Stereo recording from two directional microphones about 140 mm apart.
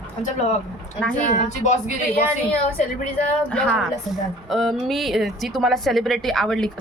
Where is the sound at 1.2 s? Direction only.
60° left (ahead or behind).